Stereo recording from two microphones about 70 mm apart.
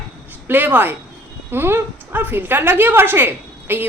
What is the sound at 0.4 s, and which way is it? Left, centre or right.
A woman's voice, right.